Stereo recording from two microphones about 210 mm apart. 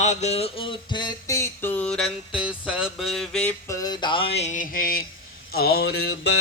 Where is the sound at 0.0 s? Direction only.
35° left (ahead or behind); by 3.5 s centre (ahead or behind).